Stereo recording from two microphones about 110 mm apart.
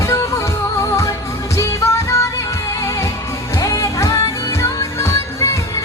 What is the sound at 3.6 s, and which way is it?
Music, 30° left (ahead or behind).